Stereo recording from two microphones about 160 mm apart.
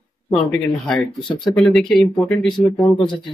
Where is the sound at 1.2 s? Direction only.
30° left (ahead or behind).